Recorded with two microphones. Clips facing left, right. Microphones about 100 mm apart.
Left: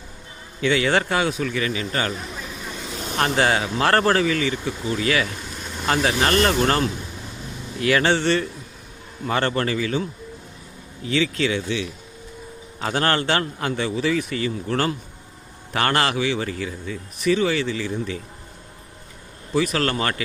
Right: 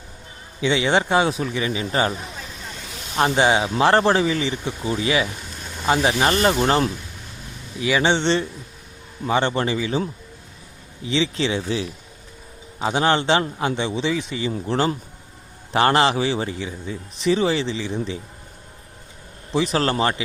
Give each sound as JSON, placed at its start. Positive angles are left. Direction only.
{"t": 0.6, "sound": "speech", "side_deg": -25}
{"t": 3.2, "sound": "speech", "side_deg": -15}
{"t": 7.8, "sound": "speech", "side_deg": -10}
{"t": 8.0, "sound": "speech", "side_deg": -25}
{"t": 11.1, "sound": "speech", "side_deg": -25}
{"t": 12.8, "sound": "speech", "side_deg": -15}
{"t": 15.7, "sound": "speech", "side_deg": -25}
{"t": 19.5, "sound": "speech", "side_deg": -30}